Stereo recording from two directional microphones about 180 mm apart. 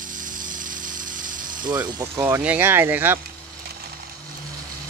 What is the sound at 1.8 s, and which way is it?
Speech, 20° right (ahead or behind).